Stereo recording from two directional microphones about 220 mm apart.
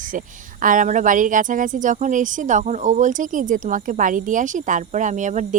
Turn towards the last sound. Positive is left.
turn(degrees=-35)  # may be behind; listen again after turning